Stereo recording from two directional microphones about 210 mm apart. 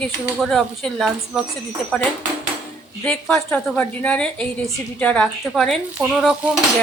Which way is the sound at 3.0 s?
5° left (ahead or behind).